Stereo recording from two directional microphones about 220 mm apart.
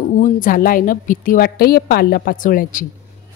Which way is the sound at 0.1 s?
40° left (ahead or behind).